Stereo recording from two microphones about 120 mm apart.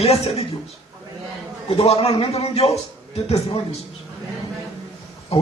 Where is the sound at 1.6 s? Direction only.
55° left (ahead or behind).